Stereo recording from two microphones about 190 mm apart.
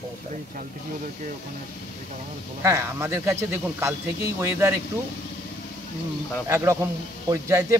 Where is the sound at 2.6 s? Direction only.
15° right (ahead or behind).